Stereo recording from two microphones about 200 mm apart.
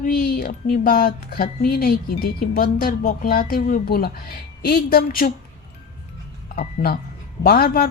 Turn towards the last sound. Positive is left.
turn(degrees=50)  # may be behind; listen again after turning